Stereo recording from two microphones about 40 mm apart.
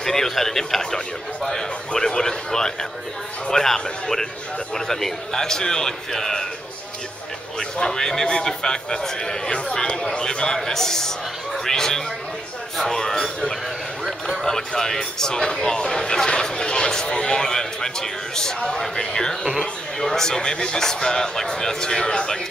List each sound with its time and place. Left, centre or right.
0.0 s a man's voice: centre
1.9 s a man's voice: centre
7.7 s a man's voice: centre